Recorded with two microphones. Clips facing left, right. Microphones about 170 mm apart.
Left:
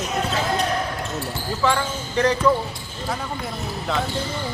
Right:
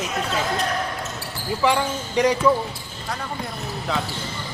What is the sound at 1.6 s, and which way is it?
Speech, 15° right (ahead or behind).